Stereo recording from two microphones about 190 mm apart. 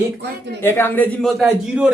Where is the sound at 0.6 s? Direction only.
10° left (ahead or behind); by 1.9 s 5° right (ahead or behind).